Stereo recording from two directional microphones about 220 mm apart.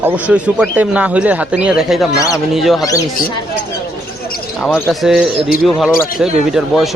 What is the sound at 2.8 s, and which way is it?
Speech, 15° left (ahead or behind).